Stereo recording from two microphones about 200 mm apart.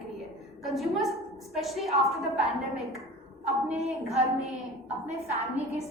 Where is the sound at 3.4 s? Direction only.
35° right (ahead or behind).